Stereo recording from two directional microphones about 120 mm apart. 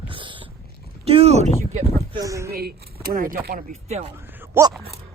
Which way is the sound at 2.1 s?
25° right (ahead or behind).